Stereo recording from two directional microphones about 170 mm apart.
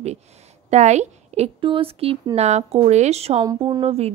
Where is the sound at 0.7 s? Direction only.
40° right (ahead or behind).